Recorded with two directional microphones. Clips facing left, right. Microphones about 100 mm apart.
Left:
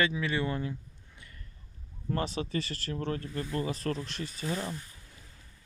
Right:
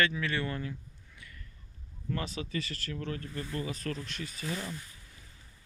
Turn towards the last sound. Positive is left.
turn(degrees=35)  # may be behind; listen again after turning